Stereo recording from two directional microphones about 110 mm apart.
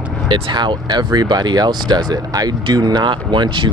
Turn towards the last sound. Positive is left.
turn(degrees=-45)  # may be behind; listen again after turning